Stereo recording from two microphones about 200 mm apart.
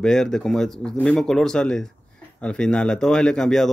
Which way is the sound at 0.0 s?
5° left (ahead or behind).